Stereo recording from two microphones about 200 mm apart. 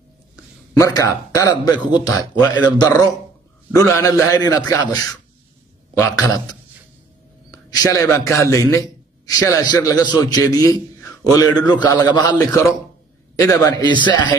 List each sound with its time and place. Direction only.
0.7 s a man's voice: 15° left (ahead or behind)
6.2 s a man's voice: 20° left (ahead or behind)
7.5 s a man's voice: 20° left (ahead or behind)